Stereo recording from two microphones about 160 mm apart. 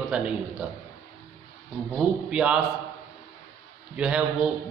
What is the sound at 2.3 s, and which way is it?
Speech, 5° right (ahead or behind).